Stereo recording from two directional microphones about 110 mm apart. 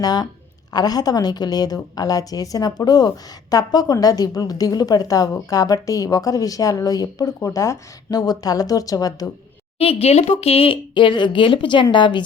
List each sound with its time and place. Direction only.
0.0 s a woman's voice: 35° left (ahead or behind)
9.7 s speech: 60° left (ahead or behind)